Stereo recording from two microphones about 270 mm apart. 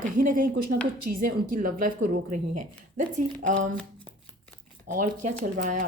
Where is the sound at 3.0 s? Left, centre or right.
Right.